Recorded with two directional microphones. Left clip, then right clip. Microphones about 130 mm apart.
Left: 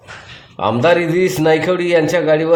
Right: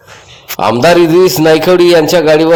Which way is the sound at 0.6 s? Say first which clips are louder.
Right 6 dB; 40° right (ahead or behind).